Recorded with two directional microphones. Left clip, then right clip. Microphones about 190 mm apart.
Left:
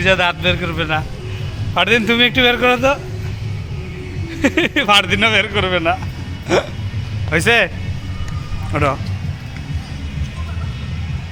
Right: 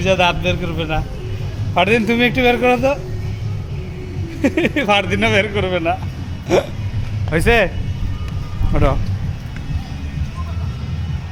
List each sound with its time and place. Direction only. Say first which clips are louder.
0.0 s speech: left 1 dB; centre (ahead or behind)
4.4 s speech: left 2 dB; centre (ahead or behind)
8.7 s speech: left 2 dB; 5° right (ahead or behind)